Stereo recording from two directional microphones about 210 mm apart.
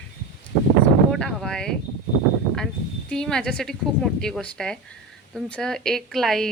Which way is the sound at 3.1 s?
5° left (ahead or behind).